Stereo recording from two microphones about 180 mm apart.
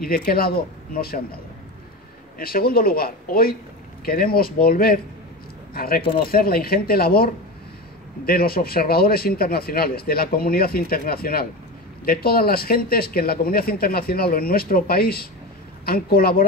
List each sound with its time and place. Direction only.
0.0 s speech: 55° left (ahead or behind)
2.3 s speech: 55° left (ahead or behind)
8.3 s speech: 55° left (ahead or behind)